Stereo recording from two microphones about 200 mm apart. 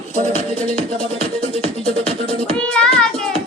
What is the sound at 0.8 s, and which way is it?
Music, 30° left (ahead or behind).